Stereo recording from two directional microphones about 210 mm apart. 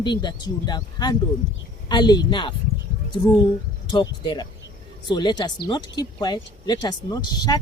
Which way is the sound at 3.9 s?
20° left (ahead or behind).